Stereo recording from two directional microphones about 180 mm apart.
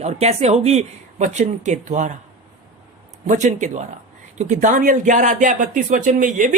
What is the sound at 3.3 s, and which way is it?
A woman's voice, 40° right (ahead or behind).